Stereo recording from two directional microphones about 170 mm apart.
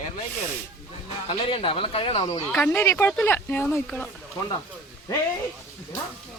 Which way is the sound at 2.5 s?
10° left (ahead or behind).